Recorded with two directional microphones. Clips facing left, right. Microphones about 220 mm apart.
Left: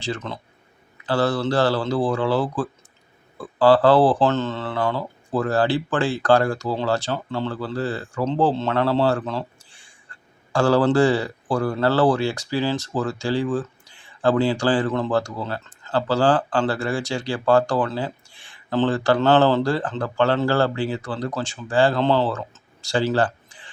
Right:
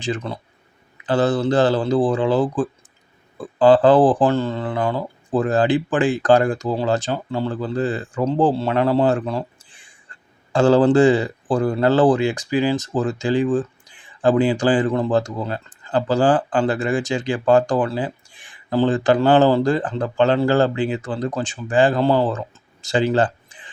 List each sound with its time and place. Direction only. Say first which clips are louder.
0.0 s speech: right 3 dB; 15° right (ahead or behind)